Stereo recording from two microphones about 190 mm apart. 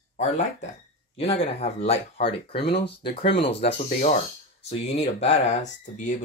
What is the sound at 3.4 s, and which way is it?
Speech, 35° left (ahead or behind).